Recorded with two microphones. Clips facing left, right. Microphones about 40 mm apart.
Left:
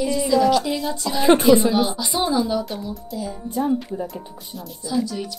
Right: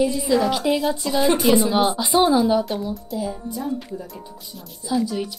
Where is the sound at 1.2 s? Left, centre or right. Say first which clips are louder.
Left 4 dB; left.